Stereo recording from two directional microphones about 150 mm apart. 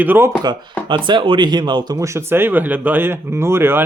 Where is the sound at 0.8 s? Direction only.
35° right (ahead or behind).